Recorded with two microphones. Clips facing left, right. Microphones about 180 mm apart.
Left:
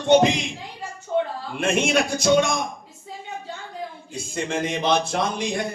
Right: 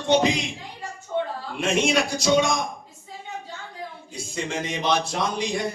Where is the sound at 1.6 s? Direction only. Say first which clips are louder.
Left 1 dB; 55° left (ahead or behind).